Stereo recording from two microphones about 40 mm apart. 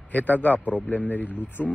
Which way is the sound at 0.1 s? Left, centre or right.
Left.